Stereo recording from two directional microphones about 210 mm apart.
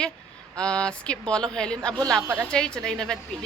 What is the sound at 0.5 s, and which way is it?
Speech, 5° left (ahead or behind).